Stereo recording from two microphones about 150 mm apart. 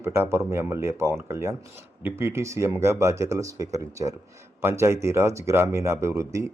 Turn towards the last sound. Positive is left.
turn(degrees=-20)  # may be behind; listen again after turning